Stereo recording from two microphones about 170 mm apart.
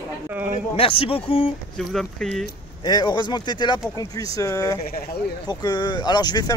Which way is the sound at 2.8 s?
25° left (ahead or behind).